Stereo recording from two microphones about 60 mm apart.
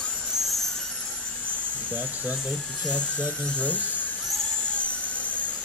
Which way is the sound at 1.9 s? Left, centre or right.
Right.